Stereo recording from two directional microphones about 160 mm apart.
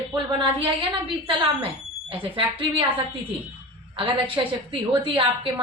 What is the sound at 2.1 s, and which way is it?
Speech, 30° right (ahead or behind).